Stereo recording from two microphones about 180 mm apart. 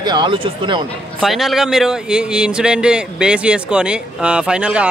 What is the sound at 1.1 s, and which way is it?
A man's voice, centre (ahead or behind).